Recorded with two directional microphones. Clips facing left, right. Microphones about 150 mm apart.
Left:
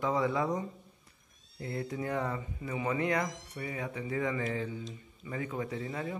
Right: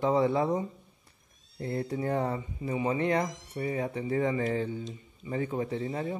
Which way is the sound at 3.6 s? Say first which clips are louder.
Right 7 dB; 30° right (ahead or behind).